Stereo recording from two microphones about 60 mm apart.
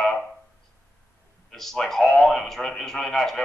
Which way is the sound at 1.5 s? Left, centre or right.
Centre.